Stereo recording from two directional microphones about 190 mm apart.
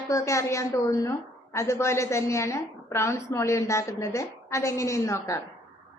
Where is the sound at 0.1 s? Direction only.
15° left (ahead or behind).